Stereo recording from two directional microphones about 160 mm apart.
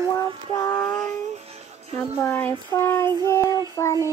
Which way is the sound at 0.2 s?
25° left (ahead or behind).